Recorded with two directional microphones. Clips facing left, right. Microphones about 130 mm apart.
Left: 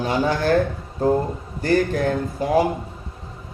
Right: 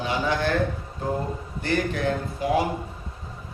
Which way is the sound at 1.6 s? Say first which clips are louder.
Left 5 dB; 40° left (ahead or behind).